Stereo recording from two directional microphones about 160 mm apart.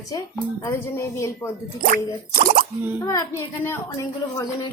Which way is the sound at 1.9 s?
60° right (ahead or behind).